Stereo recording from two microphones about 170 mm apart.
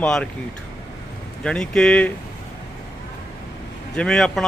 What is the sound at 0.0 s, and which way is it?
Speech, 5° left (ahead or behind).